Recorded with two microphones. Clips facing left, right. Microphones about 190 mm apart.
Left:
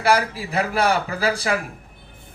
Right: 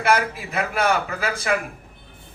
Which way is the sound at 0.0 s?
35° left (ahead or behind).